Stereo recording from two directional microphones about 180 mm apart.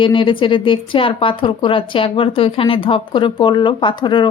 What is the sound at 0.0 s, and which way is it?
A woman's voice, 25° left (ahead or behind).